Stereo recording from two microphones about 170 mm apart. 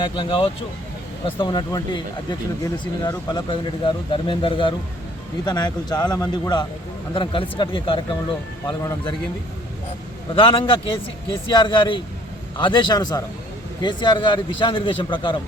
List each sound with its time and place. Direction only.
0.0 s speech: 30° left (ahead or behind)
8.6 s speech: 20° left (ahead or behind)
10.3 s speech: 30° left (ahead or behind)